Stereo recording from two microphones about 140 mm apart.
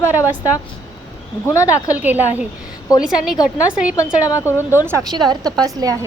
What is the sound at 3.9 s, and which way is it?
Speech, 25° left (ahead or behind).